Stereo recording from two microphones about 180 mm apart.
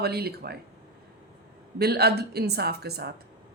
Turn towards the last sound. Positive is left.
turn(degrees=-65)  # may be behind; listen again after turning